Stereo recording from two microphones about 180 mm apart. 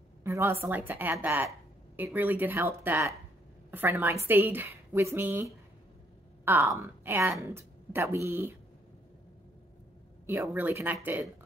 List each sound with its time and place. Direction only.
0.2 s speech: 15° right (ahead or behind)
10.2 s speech: 15° right (ahead or behind)